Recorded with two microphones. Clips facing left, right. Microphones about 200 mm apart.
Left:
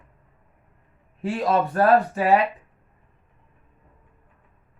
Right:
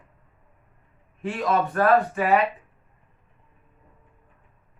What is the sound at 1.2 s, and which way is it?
Speech, 35° left (ahead or behind).